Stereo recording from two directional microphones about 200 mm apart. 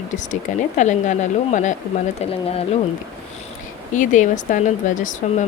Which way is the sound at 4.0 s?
40° left (ahead or behind).